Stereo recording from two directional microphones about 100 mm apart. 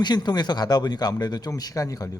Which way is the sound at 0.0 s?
45° left (ahead or behind).